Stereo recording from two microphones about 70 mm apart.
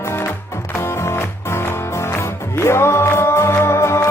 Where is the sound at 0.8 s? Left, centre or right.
Left.